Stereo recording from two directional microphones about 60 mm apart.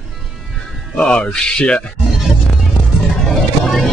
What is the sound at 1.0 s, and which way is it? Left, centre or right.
Speech, centre.